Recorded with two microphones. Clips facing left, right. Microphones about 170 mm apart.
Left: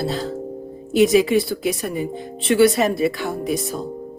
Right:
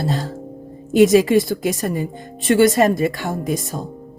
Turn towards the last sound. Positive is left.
turn(degrees=-45)  # may be behind; listen again after turning